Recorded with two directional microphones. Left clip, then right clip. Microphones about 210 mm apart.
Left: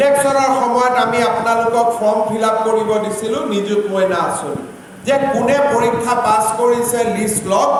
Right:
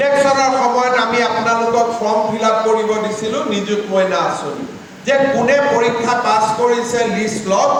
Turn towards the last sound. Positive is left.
turn(degrees=50)  # may be behind; listen again after turning